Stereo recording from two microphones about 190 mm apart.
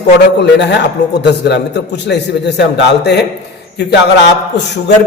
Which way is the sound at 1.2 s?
65° left (ahead or behind).